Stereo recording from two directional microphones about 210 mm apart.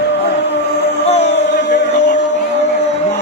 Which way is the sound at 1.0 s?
30° left (ahead or behind).